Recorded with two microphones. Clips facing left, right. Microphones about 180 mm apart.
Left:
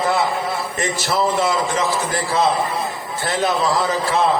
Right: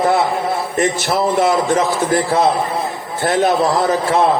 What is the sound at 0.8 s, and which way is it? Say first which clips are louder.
Speech: right 5 dB; 55° right (ahead or behind).